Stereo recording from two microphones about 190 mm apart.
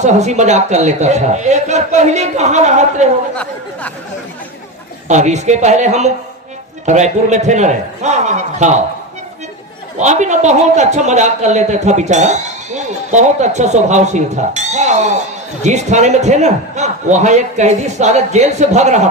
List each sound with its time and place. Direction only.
0.0 s a man's voice: 40° right (ahead or behind)
5.0 s a man's voice: 40° right (ahead or behind)
10.0 s a man's voice: 40° right (ahead or behind)